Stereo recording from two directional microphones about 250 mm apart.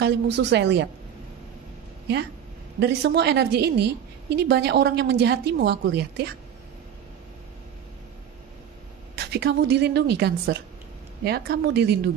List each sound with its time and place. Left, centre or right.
0.0 s a woman's voice: right
2.8 s a woman's voice: right
9.2 s a woman's voice: right